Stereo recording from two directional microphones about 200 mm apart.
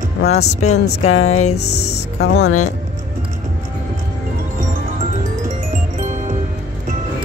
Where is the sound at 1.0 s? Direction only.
90° left.